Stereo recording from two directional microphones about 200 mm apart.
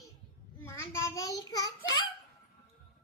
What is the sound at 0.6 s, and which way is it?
Child singing, 15° left (ahead or behind).